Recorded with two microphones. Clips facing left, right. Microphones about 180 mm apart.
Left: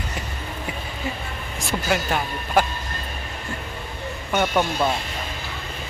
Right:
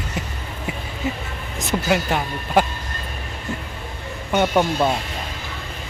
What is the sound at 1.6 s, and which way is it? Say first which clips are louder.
Speech: right 3 dB; 20° right (ahead or behind).